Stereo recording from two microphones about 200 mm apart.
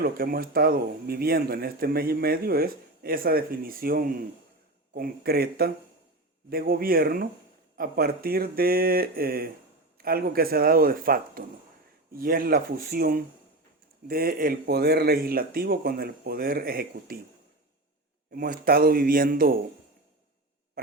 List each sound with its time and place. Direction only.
0.0 s speech: 50° right (ahead or behind)
18.3 s a man's voice: 50° right (ahead or behind)